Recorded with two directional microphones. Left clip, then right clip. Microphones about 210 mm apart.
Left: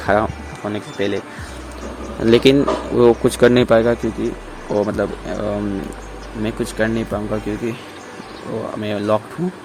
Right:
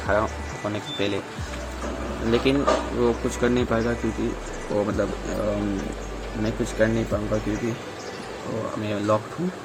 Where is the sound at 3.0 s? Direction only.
45° left (ahead or behind).